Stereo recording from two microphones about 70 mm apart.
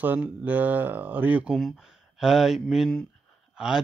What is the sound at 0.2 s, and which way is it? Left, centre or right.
Speech, right.